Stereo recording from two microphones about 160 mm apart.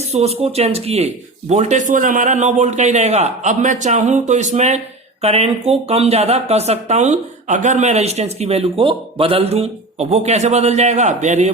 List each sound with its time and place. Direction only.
0.1 s speech: 40° right (ahead or behind)